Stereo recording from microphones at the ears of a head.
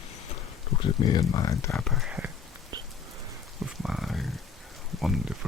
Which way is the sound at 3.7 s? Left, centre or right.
Centre.